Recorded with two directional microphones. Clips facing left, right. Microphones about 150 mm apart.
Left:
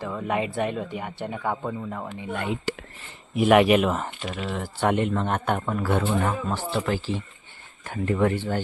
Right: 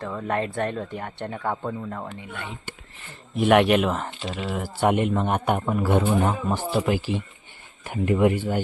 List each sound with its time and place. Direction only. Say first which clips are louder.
0.0 s speech: even; 5° left (ahead or behind)
2.7 s speech: left 11 dB; 90° left
3.3 s speech: even; centre (ahead or behind)